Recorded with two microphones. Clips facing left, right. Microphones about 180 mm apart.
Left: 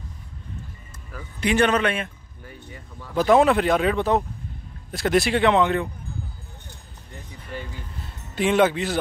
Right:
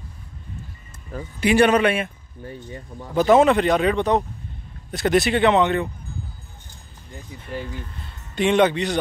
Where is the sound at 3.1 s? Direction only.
Centre (ahead or behind).